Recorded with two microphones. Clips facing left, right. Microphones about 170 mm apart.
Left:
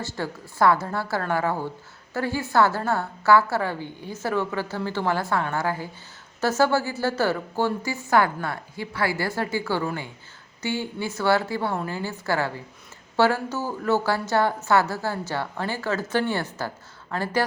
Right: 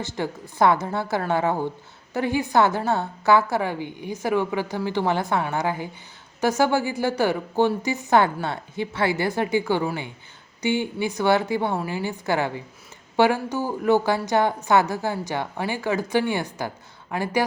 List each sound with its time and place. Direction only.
0.0 s a woman's voice: 20° right (ahead or behind)